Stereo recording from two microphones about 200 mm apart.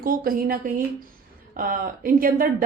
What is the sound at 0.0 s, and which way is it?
A woman's voice, 45° right (ahead or behind).